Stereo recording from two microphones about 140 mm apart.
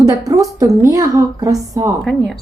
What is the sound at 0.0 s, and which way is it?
A woman's voice, 25° right (ahead or behind).